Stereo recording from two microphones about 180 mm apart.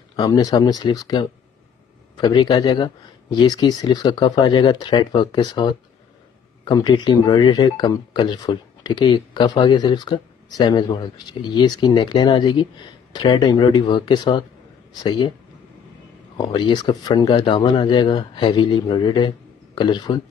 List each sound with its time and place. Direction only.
0.1 s speech: 20° left (ahead or behind)
16.3 s speech: 25° left (ahead or behind)